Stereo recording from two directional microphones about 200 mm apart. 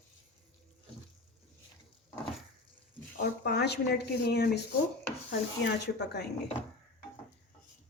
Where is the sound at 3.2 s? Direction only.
55° left (ahead or behind).